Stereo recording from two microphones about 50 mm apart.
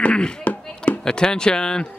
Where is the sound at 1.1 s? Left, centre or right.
Centre.